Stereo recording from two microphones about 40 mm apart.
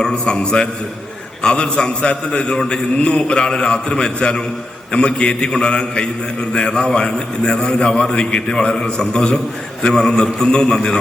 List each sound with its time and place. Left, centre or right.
0.0 s a man's voice: centre
2.6 s a man's voice: centre